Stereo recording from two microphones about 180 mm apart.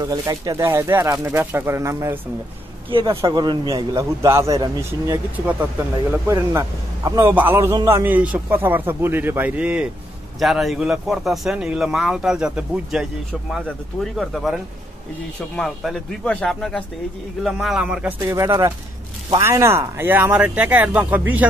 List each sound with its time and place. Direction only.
0.0 s a man's voice: 20° right (ahead or behind)
2.9 s a man's voice: 30° right (ahead or behind)
6.2 s a man's voice: 15° right (ahead or behind)
18.2 s a man's voice: 15° right (ahead or behind)